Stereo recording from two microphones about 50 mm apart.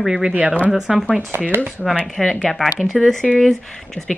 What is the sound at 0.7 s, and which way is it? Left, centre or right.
Speech, centre.